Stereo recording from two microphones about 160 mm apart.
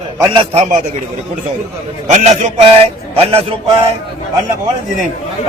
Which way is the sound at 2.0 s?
45° right (ahead or behind).